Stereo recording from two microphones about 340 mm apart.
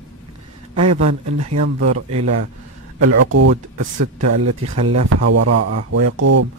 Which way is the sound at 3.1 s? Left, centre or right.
Right.